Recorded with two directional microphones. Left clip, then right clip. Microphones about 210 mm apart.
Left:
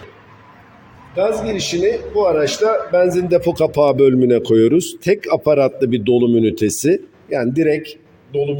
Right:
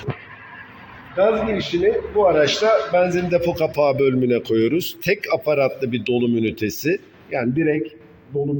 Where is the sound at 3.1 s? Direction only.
60° left (ahead or behind).